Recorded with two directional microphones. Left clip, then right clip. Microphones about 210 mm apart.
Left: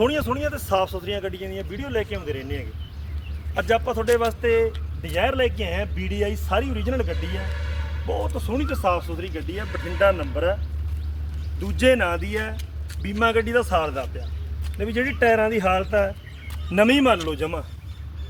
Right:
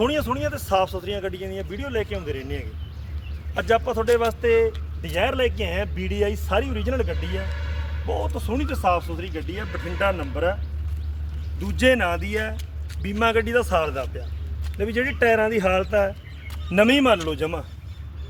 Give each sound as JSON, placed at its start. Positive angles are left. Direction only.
{"t": 0.0, "sound": "speech", "side_deg": -40}
{"t": 11.6, "sound": "speech", "side_deg": -50}